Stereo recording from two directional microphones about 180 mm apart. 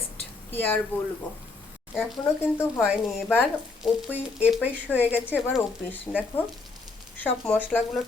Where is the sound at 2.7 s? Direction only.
5° right (ahead or behind).